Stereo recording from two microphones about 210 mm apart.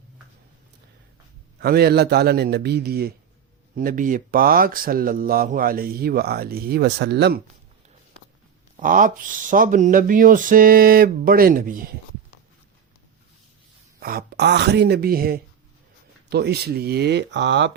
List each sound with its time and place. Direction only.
1.5 s speech: 50° right (ahead or behind)
8.7 s speech: 40° right (ahead or behind)
14.0 s speech: 45° right (ahead or behind)